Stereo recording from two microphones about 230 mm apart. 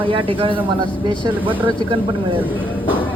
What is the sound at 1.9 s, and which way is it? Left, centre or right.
Speech, right.